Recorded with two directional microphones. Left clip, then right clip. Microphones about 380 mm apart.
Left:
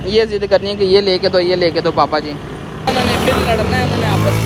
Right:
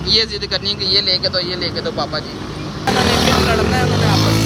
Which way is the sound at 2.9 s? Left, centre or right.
Right.